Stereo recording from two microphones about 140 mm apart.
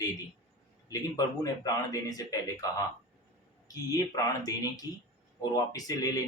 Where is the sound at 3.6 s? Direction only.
25° left (ahead or behind).